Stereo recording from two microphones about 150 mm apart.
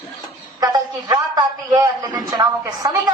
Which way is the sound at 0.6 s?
25° right (ahead or behind).